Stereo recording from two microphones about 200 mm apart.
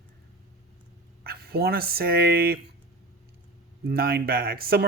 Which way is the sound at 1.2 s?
50° right (ahead or behind).